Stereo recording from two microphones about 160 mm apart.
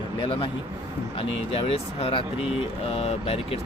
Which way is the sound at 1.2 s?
35° left (ahead or behind).